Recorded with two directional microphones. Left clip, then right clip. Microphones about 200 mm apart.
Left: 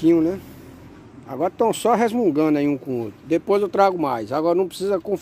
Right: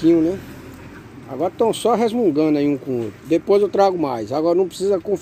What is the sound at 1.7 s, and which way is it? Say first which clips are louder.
Speech: right 1 dB; 50° left (ahead or behind).